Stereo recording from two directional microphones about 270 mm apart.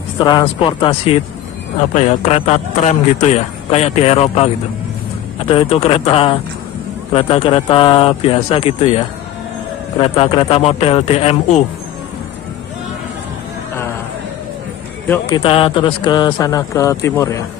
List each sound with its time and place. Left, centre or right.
0.2 s a man's voice: centre
5.5 s a man's voice: left
15.0 s a man's voice: centre